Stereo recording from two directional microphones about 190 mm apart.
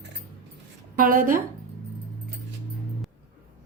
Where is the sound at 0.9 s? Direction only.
45° right (ahead or behind).